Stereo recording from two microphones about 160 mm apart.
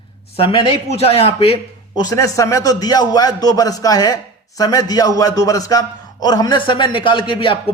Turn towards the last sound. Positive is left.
turn(degrees=30)  # may be behind; listen again after turning